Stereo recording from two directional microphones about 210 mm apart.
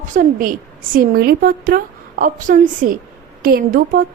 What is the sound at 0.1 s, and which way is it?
A woman's voice, 40° right (ahead or behind).